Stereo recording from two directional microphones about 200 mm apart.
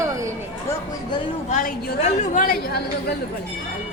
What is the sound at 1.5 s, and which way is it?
A woman's voice, 40° left (ahead or behind).